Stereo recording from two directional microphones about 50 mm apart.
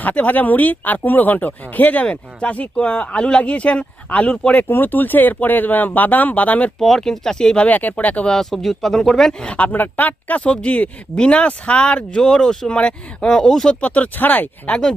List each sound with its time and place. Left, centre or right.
0.0 s speech: left
4.7 s speech: left
6.7 s speech: centre
7.7 s speech: left
8.3 s speech: centre
9.4 s speech: left; by 13.7 s centre
13.8 s speech: left